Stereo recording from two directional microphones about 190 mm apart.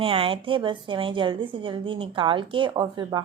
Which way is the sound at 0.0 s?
30° right (ahead or behind).